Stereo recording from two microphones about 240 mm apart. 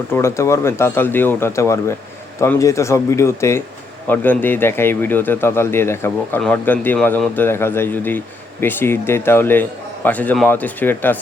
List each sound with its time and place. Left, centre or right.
0.1 s a man's voice: centre